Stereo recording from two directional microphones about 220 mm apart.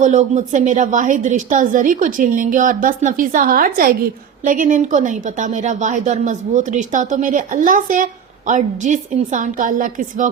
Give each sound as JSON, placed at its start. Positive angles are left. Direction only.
{"t": 0.0, "sound": "speech", "side_deg": -35}